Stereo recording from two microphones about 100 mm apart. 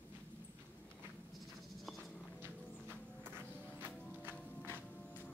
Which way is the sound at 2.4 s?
20° right (ahead or behind).